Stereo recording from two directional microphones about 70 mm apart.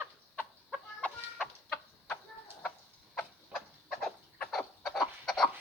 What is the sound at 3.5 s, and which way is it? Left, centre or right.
Chicken, centre.